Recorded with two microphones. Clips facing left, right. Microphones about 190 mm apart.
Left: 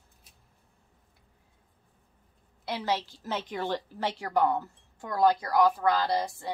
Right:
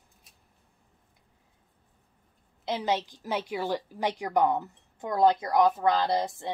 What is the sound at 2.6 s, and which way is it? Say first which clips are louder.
A woman's voice: right 2 dB; 20° right (ahead or behind).